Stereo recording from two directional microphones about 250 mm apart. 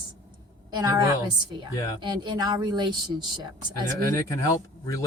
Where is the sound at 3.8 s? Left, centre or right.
Centre.